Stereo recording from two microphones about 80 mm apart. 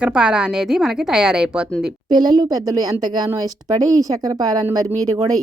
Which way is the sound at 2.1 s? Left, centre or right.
Right.